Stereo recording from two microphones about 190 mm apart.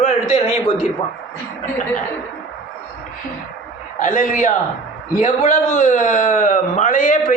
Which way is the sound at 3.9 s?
45° left (ahead or behind).